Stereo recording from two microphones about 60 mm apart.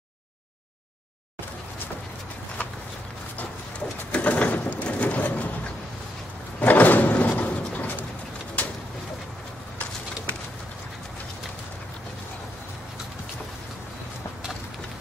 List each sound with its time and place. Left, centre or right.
4.1 s bird: left
6.6 s a sound: left
8.6 s bird: left